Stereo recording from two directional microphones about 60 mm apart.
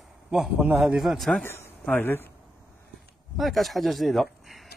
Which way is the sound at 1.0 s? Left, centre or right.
Centre.